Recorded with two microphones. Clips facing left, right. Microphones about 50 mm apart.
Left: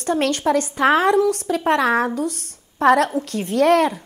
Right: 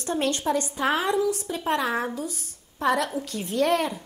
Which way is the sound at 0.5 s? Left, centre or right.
Left.